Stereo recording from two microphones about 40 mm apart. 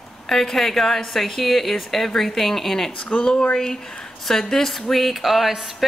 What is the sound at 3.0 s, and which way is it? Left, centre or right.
Speech, left.